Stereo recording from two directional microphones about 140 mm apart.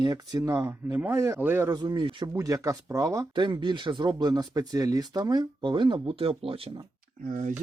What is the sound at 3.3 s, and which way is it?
Speech, 35° right (ahead or behind).